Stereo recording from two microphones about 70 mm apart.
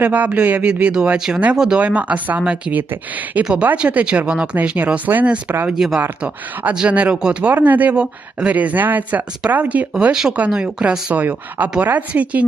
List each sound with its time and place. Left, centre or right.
0.0 s speech: right
6.0 s speech: right
7.5 s speech: right
9.9 s speech: centre
11.1 s speech: right